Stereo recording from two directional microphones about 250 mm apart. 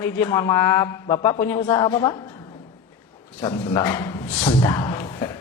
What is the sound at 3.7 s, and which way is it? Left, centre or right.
A man's voice, centre.